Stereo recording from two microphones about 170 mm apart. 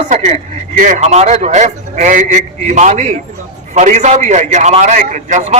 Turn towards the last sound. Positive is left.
turn(degrees=-45)  # may be behind; listen again after turning